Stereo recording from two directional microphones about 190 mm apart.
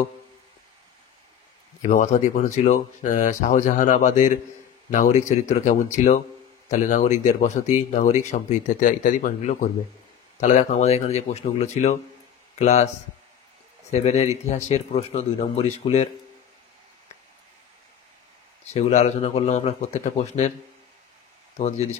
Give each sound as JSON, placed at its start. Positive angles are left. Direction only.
{"t": 1.8, "sound": "speech", "side_deg": 40}
{"t": 13.8, "sound": "speech", "side_deg": 35}
{"t": 18.7, "sound": "speech", "side_deg": 35}
{"t": 21.5, "sound": "speech", "side_deg": 35}